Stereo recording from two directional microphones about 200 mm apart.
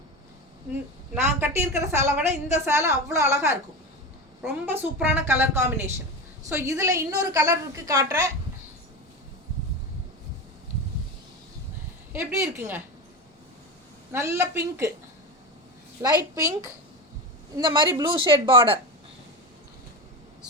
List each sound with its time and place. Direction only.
1.1 s a woman's voice: 10° right (ahead or behind)
12.1 s a woman's voice: 15° right (ahead or behind)
14.1 s a woman's voice: 15° right (ahead or behind)
16.3 s a woman's voice: 15° right (ahead or behind)